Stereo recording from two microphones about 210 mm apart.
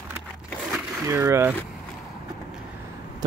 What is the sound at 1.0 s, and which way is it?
Speech, 15° right (ahead or behind).